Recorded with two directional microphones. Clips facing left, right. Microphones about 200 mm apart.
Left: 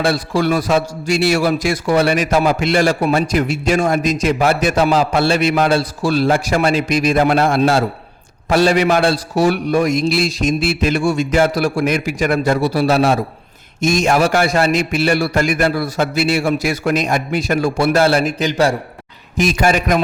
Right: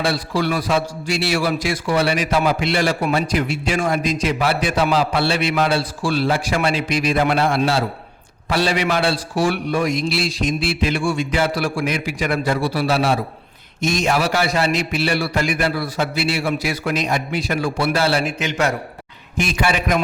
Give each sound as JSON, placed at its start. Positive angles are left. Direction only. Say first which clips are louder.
{"t": 0.0, "sound": "a man's voice", "louder": "left 4 dB", "side_deg": 45}